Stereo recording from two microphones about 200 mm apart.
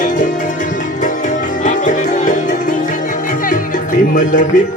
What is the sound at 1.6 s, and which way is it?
Music, 40° left (ahead or behind).